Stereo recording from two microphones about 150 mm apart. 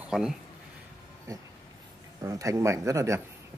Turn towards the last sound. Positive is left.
turn(degrees=-20)  # may be behind; listen again after turning